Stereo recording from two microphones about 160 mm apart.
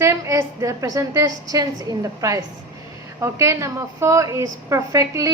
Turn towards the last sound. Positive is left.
turn(degrees=-20)  # may be behind; listen again after turning